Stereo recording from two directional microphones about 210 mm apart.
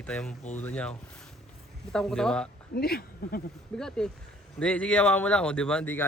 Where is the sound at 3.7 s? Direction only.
5° left (ahead or behind).